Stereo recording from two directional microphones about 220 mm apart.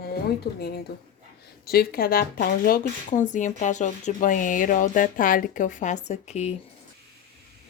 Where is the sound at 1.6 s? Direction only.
45° left (ahead or behind).